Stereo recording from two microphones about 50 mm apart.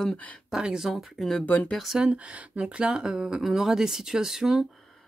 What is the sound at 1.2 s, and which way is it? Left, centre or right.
Speech, centre.